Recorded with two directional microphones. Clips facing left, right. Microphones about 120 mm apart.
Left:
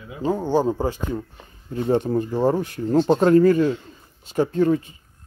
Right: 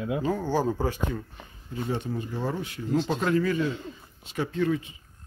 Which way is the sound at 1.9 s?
45° left (ahead or behind).